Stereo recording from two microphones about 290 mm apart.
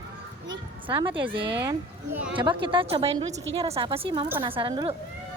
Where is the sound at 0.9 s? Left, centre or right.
Centre.